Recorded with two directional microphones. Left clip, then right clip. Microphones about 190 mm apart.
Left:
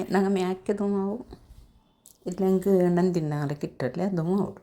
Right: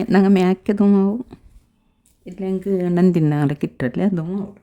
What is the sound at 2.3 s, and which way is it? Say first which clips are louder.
Speech: even; 5° right (ahead or behind).